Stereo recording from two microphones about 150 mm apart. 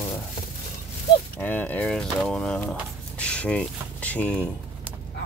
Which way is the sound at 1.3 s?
10° left (ahead or behind).